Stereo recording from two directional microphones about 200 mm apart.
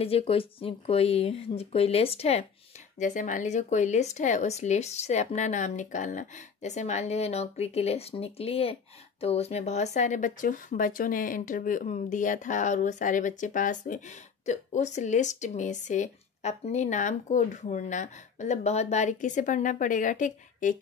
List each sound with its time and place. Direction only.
0.0 s speech: 30° left (ahead or behind)